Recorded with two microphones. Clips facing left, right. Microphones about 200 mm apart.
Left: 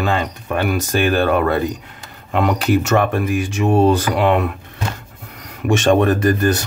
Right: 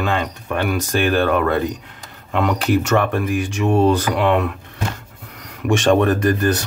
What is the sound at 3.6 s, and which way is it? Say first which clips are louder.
Speech: left 1 dB; 40° left (ahead or behind).